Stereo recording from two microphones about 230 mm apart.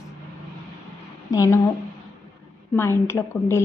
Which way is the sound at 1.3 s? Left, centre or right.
Centre.